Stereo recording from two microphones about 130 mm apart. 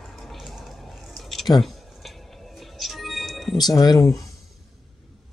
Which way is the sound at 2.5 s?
Centre (ahead or behind).